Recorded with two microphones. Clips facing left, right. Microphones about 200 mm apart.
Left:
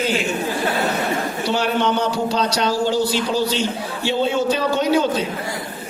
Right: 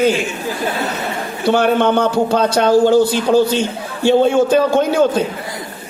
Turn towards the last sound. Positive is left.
turn(degrees=-50)  # may be behind; listen again after turning